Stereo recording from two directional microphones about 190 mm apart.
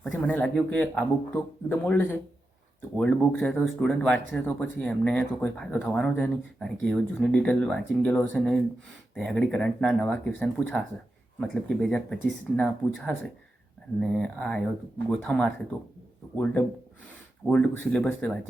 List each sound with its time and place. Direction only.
0.0 s a man's voice: 5° left (ahead or behind)